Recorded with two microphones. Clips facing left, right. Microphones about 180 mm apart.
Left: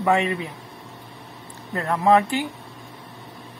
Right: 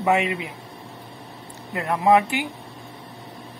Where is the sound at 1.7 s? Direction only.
15° right (ahead or behind).